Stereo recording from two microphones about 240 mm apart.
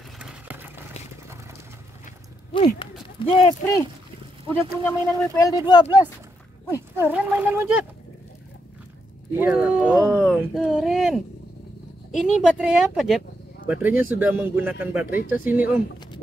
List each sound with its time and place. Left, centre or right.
0.2 s a sound: centre
2.5 s speech: left
4.8 s speech: centre
7.0 s a man's voice: centre
9.4 s speech: centre
12.4 s a man's voice: centre